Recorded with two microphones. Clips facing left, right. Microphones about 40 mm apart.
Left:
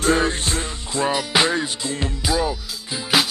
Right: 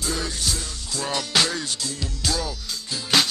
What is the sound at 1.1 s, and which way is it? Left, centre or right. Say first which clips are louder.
Music: left 2 dB; left.